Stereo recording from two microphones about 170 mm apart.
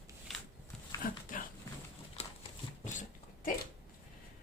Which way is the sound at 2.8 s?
50° left (ahead or behind).